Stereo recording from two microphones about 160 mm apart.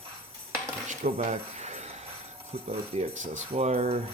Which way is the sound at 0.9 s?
40° right (ahead or behind).